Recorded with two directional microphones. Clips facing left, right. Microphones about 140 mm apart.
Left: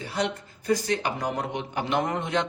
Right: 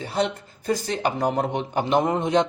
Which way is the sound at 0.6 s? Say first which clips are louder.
Right 1 dB; 30° right (ahead or behind).